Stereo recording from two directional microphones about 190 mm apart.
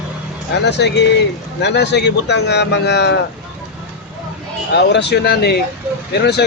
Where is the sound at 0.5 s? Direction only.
65° left (ahead or behind).